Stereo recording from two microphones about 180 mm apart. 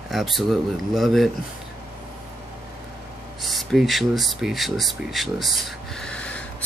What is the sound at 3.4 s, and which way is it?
Speech, centre (ahead or behind).